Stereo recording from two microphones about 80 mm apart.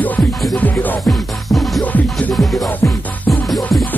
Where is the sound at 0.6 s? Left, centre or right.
Left.